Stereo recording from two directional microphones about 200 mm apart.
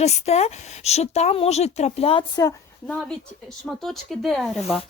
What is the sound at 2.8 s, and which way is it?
Speech, 5° left (ahead or behind).